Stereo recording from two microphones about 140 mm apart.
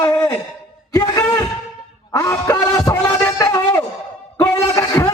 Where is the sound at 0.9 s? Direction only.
20° left (ahead or behind).